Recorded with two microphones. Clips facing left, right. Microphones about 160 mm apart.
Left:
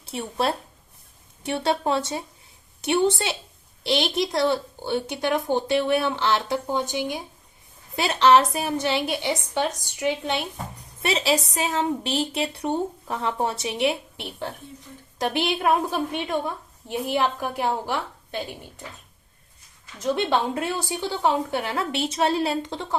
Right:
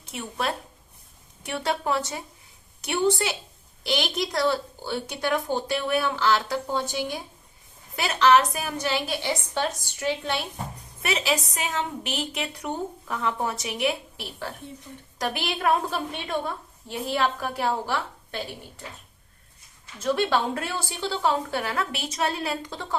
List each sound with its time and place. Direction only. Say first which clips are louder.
0.0 s a woman's voice: left 4 dB; 30° left (ahead or behind)
11.0 s a woman's voice: left 3 dB; 30° left (ahead or behind)
20.0 s a woman's voice: left 1 dB; 20° left (ahead or behind)